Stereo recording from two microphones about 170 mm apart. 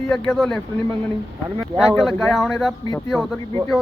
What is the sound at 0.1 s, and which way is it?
Speech, 5° left (ahead or behind).